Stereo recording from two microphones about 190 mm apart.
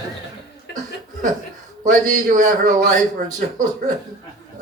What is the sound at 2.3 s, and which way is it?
Speech, 40° right (ahead or behind).